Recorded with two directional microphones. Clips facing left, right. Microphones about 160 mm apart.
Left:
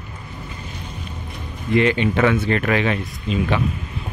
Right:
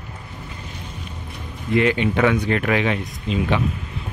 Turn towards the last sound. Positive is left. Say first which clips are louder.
# even
turn(degrees=-20)  # may be behind; listen again after turning